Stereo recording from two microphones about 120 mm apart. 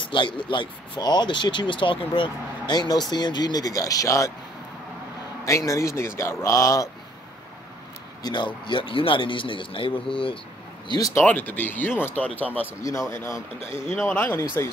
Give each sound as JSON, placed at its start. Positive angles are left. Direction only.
{"t": 0.0, "sound": "speech", "side_deg": 45}
{"t": 5.7, "sound": "speech", "side_deg": 25}
{"t": 8.2, "sound": "speech", "side_deg": 35}
{"t": 10.9, "sound": "speech", "side_deg": 30}
{"t": 11.2, "sound": "speech", "side_deg": 15}